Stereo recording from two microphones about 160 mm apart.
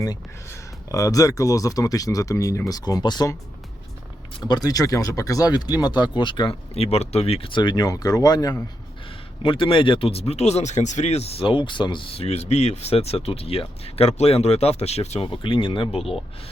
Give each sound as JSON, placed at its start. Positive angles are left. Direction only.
{"t": 0.9, "sound": "speech", "side_deg": 20}
{"t": 4.4, "sound": "speech", "side_deg": 25}